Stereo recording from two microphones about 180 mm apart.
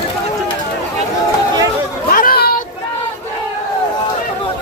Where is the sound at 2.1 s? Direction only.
50° left (ahead or behind).